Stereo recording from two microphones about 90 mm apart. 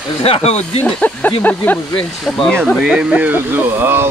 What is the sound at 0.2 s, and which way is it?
Speech, 90° left.